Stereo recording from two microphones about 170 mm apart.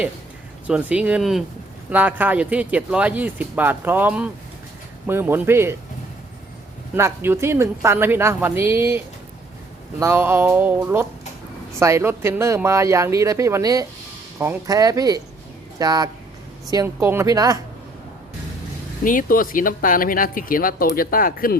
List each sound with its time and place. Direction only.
0.7 s speech: 10° right (ahead or behind)
6.9 s speech: 15° right (ahead or behind)
19.0 s speech: 55° left (ahead or behind)